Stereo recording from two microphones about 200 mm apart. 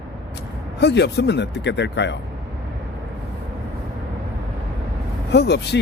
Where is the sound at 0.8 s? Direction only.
60° left (ahead or behind).